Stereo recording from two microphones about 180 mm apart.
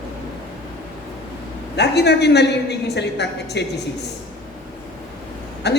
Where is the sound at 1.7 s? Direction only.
65° left (ahead or behind).